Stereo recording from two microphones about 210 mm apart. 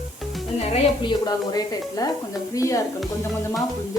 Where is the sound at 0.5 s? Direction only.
30° left (ahead or behind).